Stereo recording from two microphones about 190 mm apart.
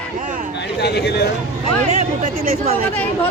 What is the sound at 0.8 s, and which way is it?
Speech, 60° left (ahead or behind).